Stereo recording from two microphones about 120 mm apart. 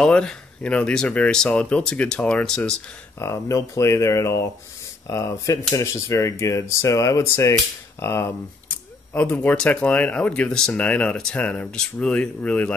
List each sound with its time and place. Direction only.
0.0 s speech: 5° left (ahead or behind)
3.2 s speech: 25° left (ahead or behind)